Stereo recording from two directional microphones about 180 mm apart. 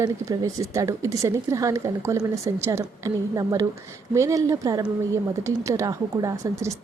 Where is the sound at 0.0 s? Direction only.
20° right (ahead or behind).